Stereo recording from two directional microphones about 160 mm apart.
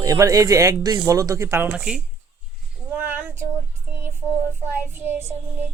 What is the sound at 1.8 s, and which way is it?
Speech, 5° right (ahead or behind).